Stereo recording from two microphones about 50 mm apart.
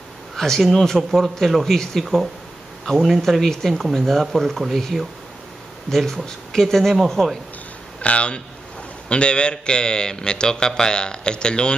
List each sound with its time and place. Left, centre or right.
0.4 s a man's voice: centre
8.0 s a man's voice: left